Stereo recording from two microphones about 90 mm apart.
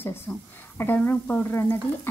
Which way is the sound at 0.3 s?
20° left (ahead or behind).